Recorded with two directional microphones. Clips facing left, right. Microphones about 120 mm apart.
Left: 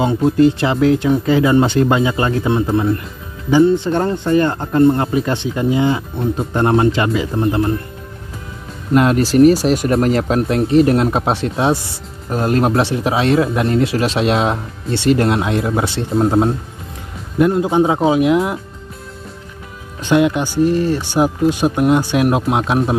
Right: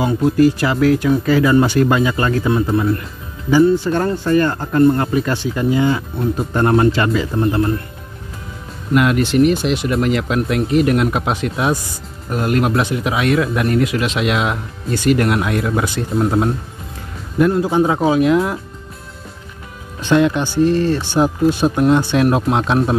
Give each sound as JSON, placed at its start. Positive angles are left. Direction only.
{"t": 0.0, "sound": "speech", "side_deg": 25}
{"t": 8.9, "sound": "speech", "side_deg": 35}
{"t": 20.0, "sound": "speech", "side_deg": 15}